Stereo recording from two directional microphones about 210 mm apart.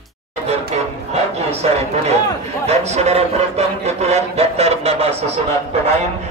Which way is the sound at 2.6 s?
30° right (ahead or behind).